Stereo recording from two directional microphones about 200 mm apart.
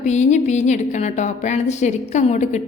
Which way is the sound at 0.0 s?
35° left (ahead or behind).